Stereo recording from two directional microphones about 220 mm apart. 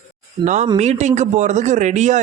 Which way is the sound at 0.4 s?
35° right (ahead or behind).